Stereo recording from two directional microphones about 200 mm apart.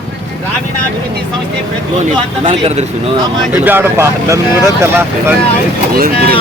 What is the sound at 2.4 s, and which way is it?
Speech, 30° right (ahead or behind).